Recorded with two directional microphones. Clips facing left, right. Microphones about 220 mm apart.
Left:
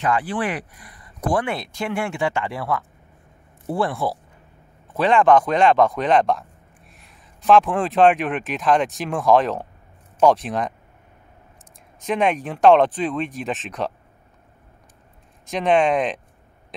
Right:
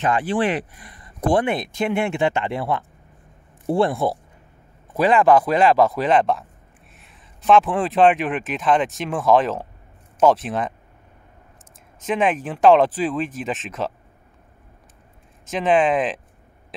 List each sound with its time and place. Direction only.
0.0 s speech: 20° right (ahead or behind)
4.9 s speech: 10° right (ahead or behind)
12.1 s speech: centre (ahead or behind)
15.4 s speech: centre (ahead or behind)